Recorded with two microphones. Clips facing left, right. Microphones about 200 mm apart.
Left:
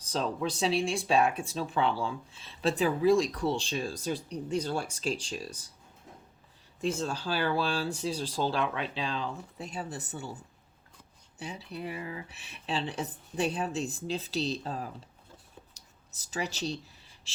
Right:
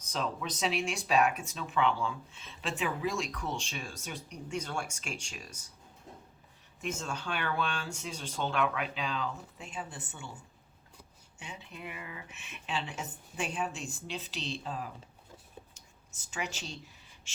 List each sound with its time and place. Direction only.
0.0 s speech: 30° left (ahead or behind)
6.8 s speech: 35° left (ahead or behind)
11.3 s speech: 35° left (ahead or behind)
15.7 s a sound: 35° left (ahead or behind)